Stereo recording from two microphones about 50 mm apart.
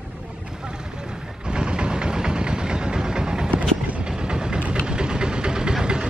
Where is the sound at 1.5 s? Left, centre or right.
Centre.